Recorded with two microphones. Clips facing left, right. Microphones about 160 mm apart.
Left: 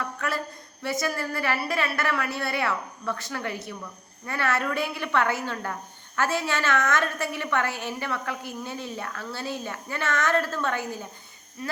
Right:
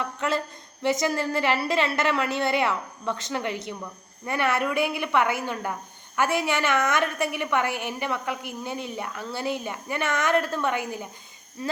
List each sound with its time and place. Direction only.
0.2 s a woman's voice: 20° right (ahead or behind)